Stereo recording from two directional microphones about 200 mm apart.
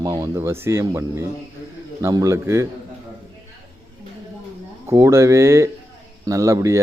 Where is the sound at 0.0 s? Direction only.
15° right (ahead or behind).